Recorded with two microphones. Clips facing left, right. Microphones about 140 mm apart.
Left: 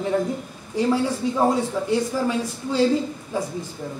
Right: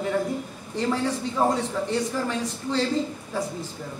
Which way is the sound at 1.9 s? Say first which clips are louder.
Left 6 dB; 10° left (ahead or behind).